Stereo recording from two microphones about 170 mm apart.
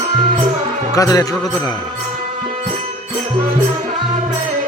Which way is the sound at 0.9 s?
20° left (ahead or behind).